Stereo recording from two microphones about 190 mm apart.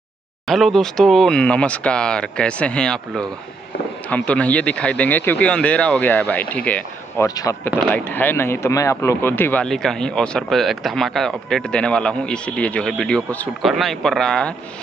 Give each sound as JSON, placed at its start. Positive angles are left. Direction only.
{"t": 0.5, "sound": "speech", "side_deg": 0}
{"t": 7.2, "sound": "speech", "side_deg": 20}